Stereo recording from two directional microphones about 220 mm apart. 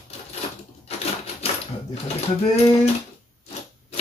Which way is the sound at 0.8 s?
30° left (ahead or behind).